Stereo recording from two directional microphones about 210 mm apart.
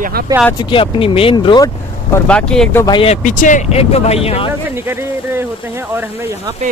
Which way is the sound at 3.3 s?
35° left (ahead or behind).